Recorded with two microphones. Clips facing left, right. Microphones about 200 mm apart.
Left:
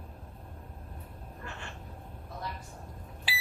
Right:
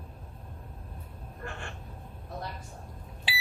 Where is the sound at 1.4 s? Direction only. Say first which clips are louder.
Right 4 dB; 50° right (ahead or behind).